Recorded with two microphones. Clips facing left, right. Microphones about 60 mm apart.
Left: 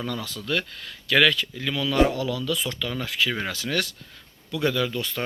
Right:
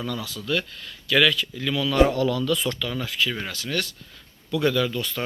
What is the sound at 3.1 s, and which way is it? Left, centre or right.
Speech, left.